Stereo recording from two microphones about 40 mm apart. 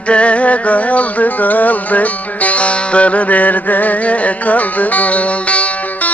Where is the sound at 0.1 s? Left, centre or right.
Left.